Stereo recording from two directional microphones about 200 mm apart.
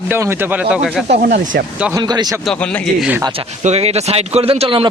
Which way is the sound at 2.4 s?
5° left (ahead or behind).